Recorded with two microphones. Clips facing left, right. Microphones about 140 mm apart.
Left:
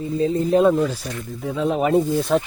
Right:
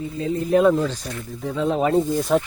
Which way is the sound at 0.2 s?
30° left (ahead or behind).